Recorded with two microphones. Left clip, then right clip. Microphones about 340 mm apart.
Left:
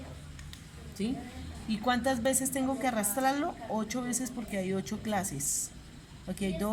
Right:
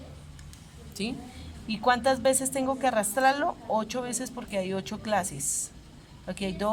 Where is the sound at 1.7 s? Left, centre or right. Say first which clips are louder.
Right 6 dB; right.